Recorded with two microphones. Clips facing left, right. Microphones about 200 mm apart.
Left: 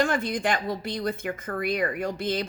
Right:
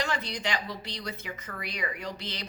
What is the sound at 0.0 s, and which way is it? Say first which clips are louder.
Speech: left 7 dB; 50° left (ahead or behind).